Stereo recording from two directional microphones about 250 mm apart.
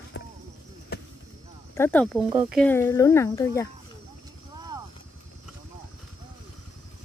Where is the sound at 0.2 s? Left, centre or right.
Left.